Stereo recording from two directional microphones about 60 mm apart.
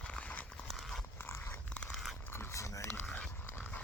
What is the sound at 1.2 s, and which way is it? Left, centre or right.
Dog, left.